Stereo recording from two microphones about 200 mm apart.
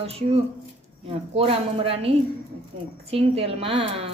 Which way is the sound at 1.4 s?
30° right (ahead or behind).